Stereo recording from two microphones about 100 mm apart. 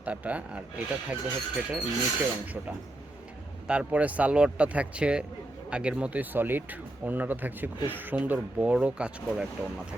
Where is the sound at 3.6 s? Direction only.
10° right (ahead or behind).